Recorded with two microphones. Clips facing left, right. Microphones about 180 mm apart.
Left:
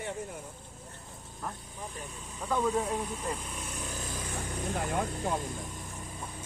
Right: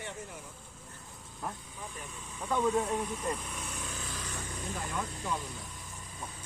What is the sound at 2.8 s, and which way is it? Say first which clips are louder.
Speech: even; 10° left (ahead or behind).